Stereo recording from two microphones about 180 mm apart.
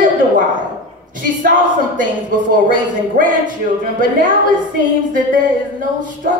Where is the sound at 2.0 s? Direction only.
50° right (ahead or behind).